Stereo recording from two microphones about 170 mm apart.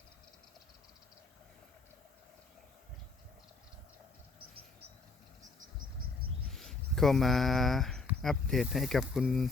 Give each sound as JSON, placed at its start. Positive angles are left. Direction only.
{"t": 4.4, "sound": "cricket", "side_deg": -65}
{"t": 6.5, "sound": "a sound", "side_deg": 0}
{"t": 8.2, "sound": "speech", "side_deg": 0}